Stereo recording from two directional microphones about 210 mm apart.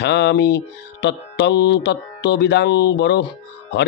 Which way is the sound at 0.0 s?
55° left (ahead or behind).